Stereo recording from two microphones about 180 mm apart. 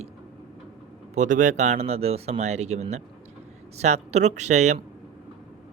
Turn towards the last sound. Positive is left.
turn(degrees=-40)  # may be behind; listen again after turning